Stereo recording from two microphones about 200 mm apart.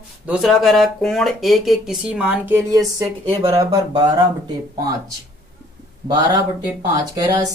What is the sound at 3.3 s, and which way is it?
Speech, 25° right (ahead or behind).